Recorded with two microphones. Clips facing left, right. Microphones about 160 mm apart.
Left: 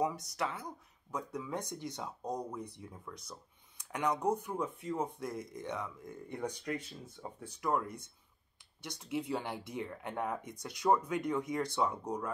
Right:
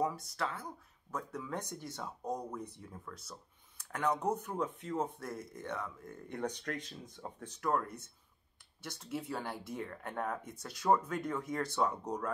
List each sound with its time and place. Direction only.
0.0 s speech: 20° left (ahead or behind)